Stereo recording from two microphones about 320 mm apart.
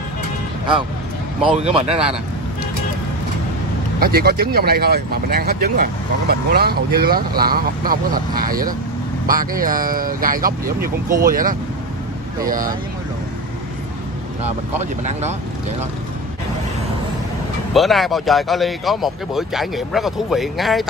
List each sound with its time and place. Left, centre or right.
1.6 s speech: centre
4.0 s speech: right
14.4 s speech: right
17.7 s speech: centre